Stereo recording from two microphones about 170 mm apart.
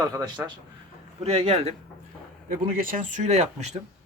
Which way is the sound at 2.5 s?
55° right (ahead or behind).